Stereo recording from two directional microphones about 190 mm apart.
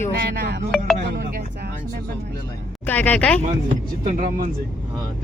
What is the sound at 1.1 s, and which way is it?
Music, 60° right (ahead or behind).